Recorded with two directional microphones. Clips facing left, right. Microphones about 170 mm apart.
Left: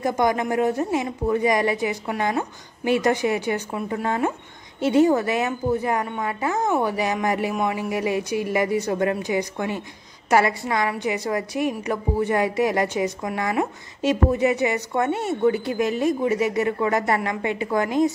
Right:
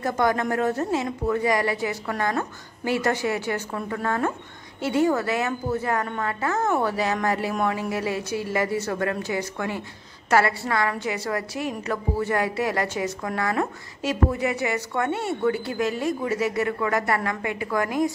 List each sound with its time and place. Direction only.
0.0 s a woman's voice: 15° left (ahead or behind)